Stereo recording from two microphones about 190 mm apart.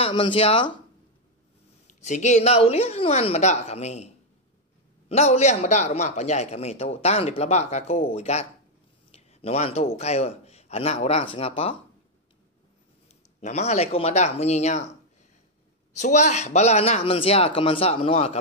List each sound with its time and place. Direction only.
0.0 s speech: 25° left (ahead or behind)
2.0 s a man's voice: 40° left (ahead or behind)
13.4 s a man's voice: 35° left (ahead or behind)
16.0 s a man's voice: 35° left (ahead or behind)